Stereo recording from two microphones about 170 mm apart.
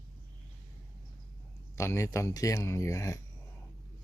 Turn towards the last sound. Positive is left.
turn(degrees=20)  # may be behind; listen again after turning